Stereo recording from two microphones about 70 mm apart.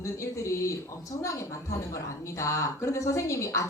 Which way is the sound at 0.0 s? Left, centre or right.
Left.